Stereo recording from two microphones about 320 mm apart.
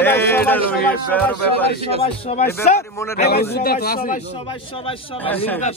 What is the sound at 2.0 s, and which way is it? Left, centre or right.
A man's voice, centre.